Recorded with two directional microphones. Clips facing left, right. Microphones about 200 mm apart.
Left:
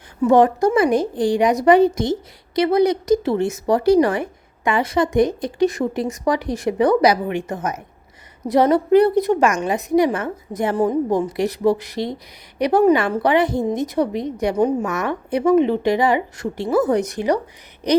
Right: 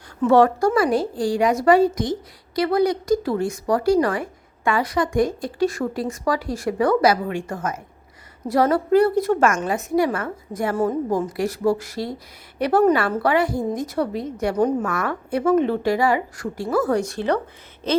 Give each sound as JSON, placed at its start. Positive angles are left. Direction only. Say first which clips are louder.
{"t": 0.2, "sound": "a woman's voice", "louder": "left 2 dB", "side_deg": 15}
{"t": 14.8, "sound": "a woman's voice", "louder": "left 2 dB", "side_deg": 20}